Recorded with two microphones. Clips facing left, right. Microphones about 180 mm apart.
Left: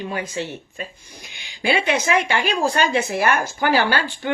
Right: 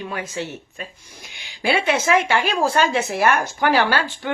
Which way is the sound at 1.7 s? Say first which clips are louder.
Right 1 dB; centre (ahead or behind).